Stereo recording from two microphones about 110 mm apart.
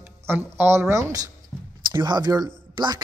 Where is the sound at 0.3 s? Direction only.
20° right (ahead or behind).